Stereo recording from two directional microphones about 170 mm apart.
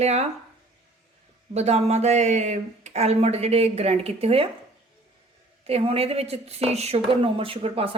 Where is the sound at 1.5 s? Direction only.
40° right (ahead or behind).